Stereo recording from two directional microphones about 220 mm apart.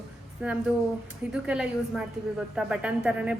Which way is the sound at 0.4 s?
5° right (ahead or behind).